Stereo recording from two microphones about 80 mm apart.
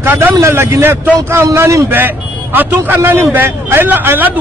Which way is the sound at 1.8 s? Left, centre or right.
Right.